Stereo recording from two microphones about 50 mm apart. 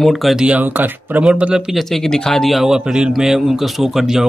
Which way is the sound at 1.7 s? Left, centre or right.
Centre.